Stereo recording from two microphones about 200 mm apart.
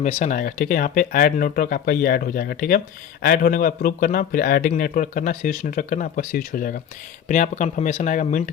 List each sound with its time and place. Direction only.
0.0 s speech: 35° left (ahead or behind)